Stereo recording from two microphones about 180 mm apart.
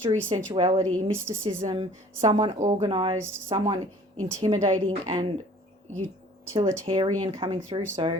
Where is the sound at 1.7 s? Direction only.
25° right (ahead or behind).